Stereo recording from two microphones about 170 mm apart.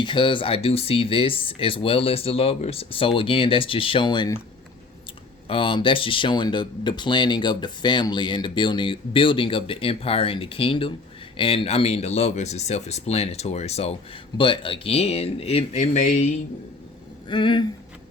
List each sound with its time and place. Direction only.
0.0 s speech: 30° left (ahead or behind)
5.5 s speech: 30° left (ahead or behind)
17.2 s speech: 30° left (ahead or behind)